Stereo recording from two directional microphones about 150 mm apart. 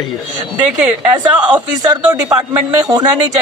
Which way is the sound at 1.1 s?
10° right (ahead or behind).